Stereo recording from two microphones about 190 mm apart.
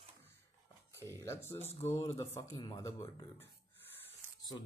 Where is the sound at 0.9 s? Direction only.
15° left (ahead or behind).